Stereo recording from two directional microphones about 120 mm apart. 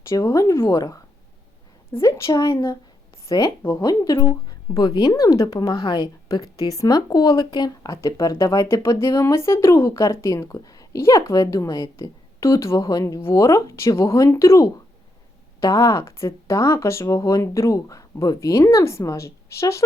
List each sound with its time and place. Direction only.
0.1 s a woman's voice: 25° left (ahead or behind)
2.0 s a woman's voice: 25° left (ahead or behind)